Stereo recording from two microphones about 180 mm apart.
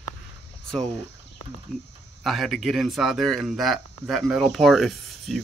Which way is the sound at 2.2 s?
Centre (ahead or behind).